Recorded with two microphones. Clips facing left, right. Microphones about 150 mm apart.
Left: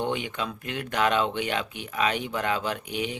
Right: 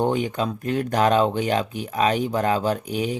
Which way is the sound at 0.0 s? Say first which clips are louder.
Right 7 dB; 40° right (ahead or behind).